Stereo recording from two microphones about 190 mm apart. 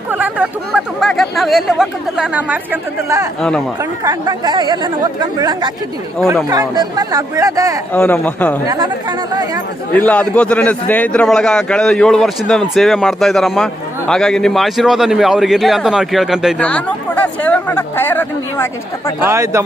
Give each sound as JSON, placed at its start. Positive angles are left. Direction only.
{"t": 0.1, "sound": "a sound", "side_deg": -10}
{"t": 0.9, "sound": "a man's voice", "side_deg": 0}
{"t": 4.0, "sound": "speech", "side_deg": -20}
{"t": 7.9, "sound": "speech", "side_deg": 10}
{"t": 8.6, "sound": "speech", "side_deg": -20}
{"t": 9.9, "sound": "a man's voice", "side_deg": 5}
{"t": 19.2, "sound": "speech", "side_deg": -15}